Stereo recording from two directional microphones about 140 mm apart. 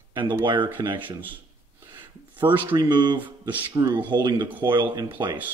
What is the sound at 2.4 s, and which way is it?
Speech, 30° right (ahead or behind).